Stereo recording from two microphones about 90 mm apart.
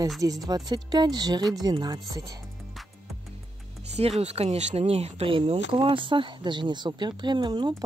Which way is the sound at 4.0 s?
90° right.